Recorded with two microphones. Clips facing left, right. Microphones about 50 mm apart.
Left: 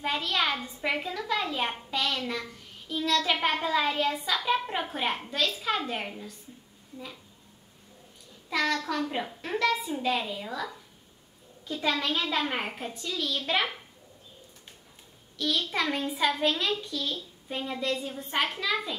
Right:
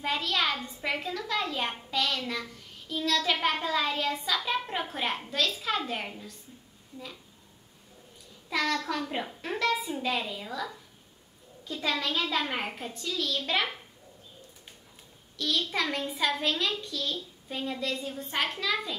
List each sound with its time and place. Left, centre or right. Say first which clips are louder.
0.0 s a child's voice: left 1 dB; centre
8.5 s a child's voice: left 1 dB; centre
15.3 s a child's voice: left 1 dB; centre